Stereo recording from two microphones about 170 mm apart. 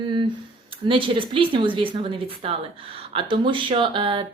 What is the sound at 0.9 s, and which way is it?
Speech, 30° right (ahead or behind).